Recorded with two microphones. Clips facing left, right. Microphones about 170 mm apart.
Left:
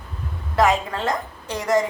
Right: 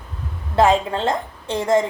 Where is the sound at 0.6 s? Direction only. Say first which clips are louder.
Right 3 dB; 30° right (ahead or behind).